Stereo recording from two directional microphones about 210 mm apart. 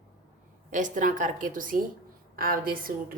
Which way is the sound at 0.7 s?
35° right (ahead or behind).